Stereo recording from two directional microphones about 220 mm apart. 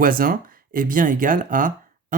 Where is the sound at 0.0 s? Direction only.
40° right (ahead or behind).